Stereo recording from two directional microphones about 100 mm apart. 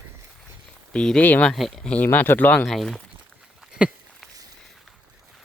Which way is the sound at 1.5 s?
Centre (ahead or behind).